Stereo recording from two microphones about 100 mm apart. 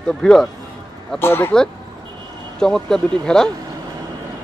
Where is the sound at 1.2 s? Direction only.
25° left (ahead or behind).